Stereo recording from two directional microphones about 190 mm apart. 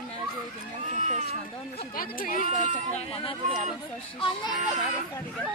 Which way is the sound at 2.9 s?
30° left (ahead or behind).